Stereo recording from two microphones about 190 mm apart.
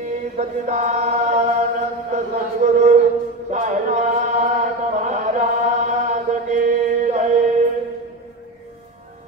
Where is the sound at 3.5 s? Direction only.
40° right (ahead or behind).